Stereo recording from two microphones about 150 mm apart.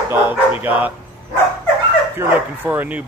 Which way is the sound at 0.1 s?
10° right (ahead or behind).